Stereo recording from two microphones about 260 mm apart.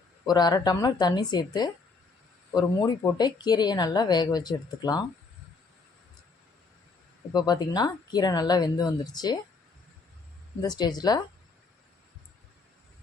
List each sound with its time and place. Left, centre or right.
0.3 s speech: centre
7.3 s speech: centre
10.6 s speech: centre